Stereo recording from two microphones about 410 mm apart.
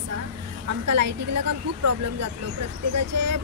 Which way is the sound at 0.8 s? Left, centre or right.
Right.